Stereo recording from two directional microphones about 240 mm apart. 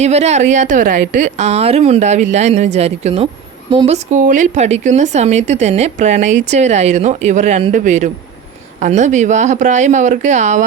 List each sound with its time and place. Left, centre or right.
0.0 s a woman's voice: right